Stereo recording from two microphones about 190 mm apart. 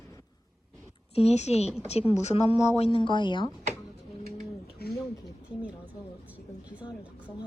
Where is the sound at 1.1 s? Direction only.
35° left (ahead or behind).